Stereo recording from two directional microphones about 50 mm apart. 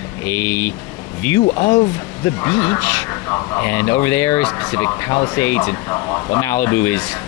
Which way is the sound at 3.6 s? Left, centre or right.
Left.